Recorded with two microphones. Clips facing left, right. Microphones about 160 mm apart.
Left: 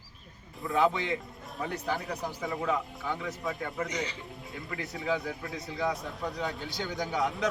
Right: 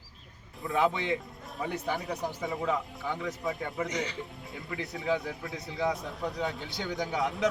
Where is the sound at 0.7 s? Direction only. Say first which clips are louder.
Left 1 dB; 20° right (ahead or behind).